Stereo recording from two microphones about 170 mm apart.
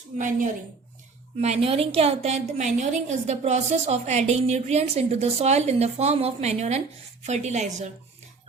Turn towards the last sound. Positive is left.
turn(degrees=-40)  # may be behind; listen again after turning